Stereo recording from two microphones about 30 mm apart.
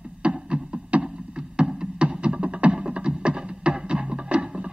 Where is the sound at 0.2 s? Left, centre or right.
Right.